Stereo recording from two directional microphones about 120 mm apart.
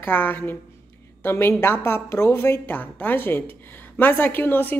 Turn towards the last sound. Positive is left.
turn(degrees=15)  # may be behind; listen again after turning